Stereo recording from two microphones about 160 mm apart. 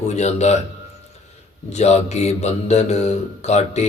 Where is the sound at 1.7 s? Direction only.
45° left (ahead or behind).